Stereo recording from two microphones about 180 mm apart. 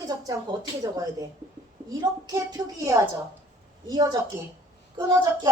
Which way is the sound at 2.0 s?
20° right (ahead or behind).